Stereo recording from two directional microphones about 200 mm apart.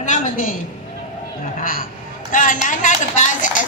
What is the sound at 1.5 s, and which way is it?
A man's voice, 45° left (ahead or behind).